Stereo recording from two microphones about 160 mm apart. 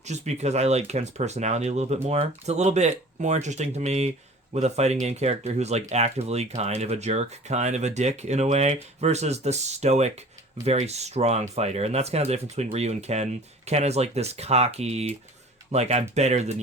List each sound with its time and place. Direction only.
0.0 s speech: 45° right (ahead or behind)